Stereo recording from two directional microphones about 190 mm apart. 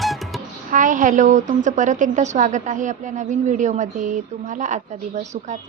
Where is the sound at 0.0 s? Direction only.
Centre (ahead or behind).